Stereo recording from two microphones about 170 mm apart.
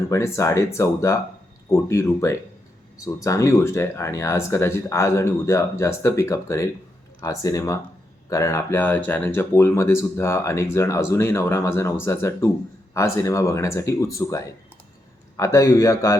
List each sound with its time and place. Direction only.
0.1 s speech: 15° left (ahead or behind)